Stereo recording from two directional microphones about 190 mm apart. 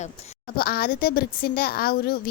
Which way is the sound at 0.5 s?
50° left (ahead or behind).